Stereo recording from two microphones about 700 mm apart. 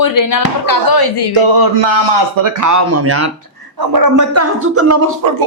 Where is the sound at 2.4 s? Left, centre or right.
Right.